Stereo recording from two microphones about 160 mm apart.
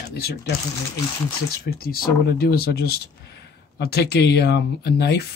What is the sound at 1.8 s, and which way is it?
Speech, 70° left (ahead or behind).